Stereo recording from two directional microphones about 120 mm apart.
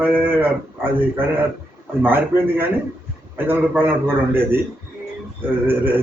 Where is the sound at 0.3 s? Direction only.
15° right (ahead or behind).